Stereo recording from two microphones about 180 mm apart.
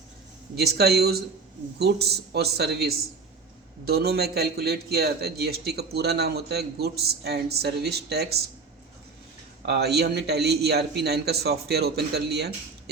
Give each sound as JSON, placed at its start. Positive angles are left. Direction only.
{"t": 0.5, "sound": "a man's voice", "side_deg": -60}
{"t": 9.6, "sound": "a man's voice", "side_deg": -65}